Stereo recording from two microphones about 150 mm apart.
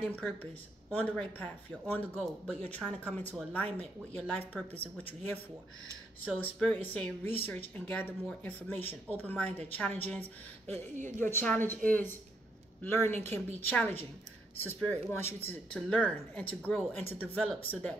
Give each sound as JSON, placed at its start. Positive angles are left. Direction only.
{"t": 0.1, "sound": "speech", "side_deg": 10}
{"t": 11.0, "sound": "a woman's voice", "side_deg": -55}
{"t": 11.2, "sound": "speech", "side_deg": 15}